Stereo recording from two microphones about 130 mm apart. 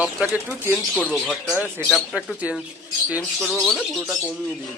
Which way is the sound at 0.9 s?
10° left (ahead or behind).